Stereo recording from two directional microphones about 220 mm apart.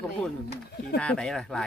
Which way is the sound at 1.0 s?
5° left (ahead or behind).